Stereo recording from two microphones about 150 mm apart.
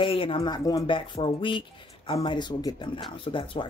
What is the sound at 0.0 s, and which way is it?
Speech, 35° left (ahead or behind).